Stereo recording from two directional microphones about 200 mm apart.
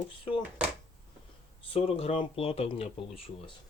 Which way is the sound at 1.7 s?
30° left (ahead or behind).